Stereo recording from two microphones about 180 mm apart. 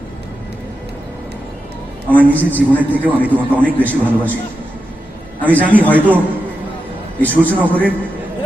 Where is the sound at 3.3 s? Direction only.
10° left (ahead or behind).